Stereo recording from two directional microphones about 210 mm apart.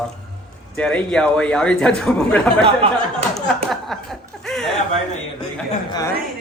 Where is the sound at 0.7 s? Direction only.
5° left (ahead or behind).